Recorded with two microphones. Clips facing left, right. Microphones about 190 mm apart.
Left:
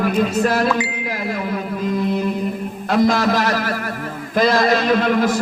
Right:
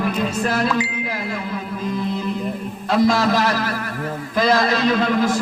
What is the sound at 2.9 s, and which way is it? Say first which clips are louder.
A man's voice: left 1 dB; 50° left (ahead or behind).